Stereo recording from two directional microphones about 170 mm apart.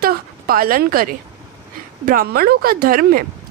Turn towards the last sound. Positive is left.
turn(degrees=-60)  # may be behind; listen again after turning